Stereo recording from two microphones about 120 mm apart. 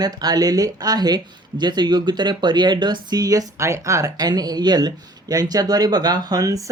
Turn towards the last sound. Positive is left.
turn(degrees=-30)  # may be behind; listen again after turning